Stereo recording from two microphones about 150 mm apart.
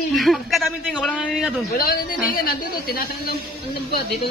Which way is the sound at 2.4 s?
85° left.